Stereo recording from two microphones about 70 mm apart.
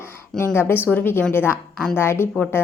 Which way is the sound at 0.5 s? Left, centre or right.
Left.